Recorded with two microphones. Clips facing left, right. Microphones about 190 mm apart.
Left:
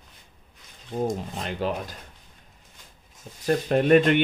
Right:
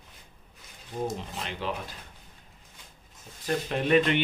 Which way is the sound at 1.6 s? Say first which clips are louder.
Left 6 dB; 45° left (ahead or behind).